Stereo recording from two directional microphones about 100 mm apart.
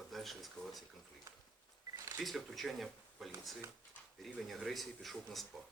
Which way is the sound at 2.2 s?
Centre (ahead or behind).